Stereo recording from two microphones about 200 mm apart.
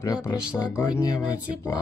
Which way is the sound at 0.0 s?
20° left (ahead or behind).